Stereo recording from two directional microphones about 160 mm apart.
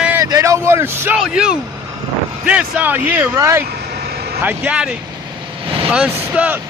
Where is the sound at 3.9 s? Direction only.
85° right.